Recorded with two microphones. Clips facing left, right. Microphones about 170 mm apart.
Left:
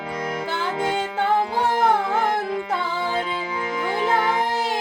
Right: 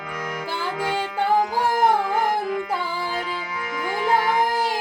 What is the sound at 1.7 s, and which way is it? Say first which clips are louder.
Music: even; 25° left (ahead or behind).